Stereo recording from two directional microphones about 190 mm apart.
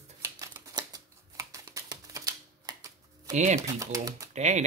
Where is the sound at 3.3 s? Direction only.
40° right (ahead or behind).